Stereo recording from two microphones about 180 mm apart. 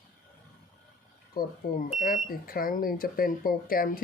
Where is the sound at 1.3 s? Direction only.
55° left (ahead or behind).